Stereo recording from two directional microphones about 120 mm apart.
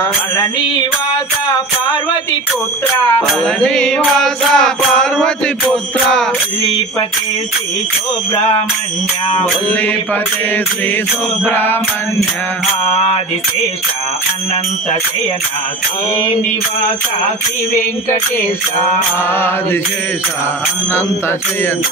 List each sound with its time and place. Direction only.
3.6 s mantra: 5° left (ahead or behind)
8.4 s a sound: 30° left (ahead or behind)
11.4 s music: 15° left (ahead or behind)